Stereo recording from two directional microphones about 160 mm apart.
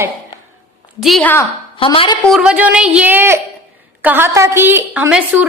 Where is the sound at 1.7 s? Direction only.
35° left (ahead or behind).